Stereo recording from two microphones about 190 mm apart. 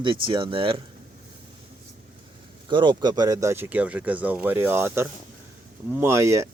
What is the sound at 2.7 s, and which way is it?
Speech, 25° right (ahead or behind).